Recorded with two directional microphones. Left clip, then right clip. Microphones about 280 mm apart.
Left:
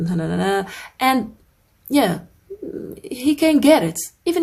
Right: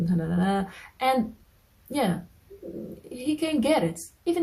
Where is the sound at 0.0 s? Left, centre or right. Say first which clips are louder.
Left 6 dB; left.